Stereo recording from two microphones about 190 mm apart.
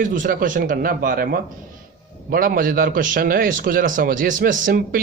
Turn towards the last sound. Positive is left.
turn(degrees=-45)  # may be behind; listen again after turning